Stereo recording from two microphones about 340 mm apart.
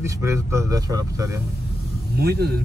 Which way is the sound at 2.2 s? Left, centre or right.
Right.